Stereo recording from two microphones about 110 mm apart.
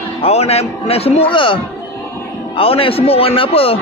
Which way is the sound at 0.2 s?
70° left (ahead or behind).